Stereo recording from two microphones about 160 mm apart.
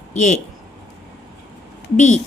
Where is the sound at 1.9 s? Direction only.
50° left (ahead or behind).